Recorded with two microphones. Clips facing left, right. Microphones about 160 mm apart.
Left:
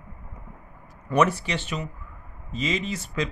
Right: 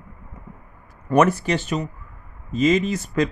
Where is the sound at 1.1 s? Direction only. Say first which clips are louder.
Right 5 dB; 50° right (ahead or behind).